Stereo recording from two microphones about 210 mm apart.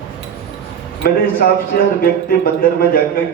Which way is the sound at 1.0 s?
45° left (ahead or behind).